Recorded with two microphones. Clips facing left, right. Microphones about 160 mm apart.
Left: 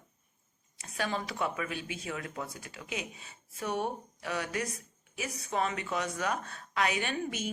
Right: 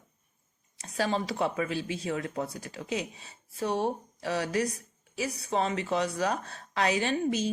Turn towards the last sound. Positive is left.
turn(degrees=-30)  # may be behind; listen again after turning